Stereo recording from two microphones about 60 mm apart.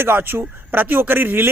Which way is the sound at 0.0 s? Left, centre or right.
Right.